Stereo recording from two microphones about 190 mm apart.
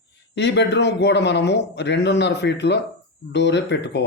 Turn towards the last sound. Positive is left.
turn(degrees=65)  # may be behind; listen again after turning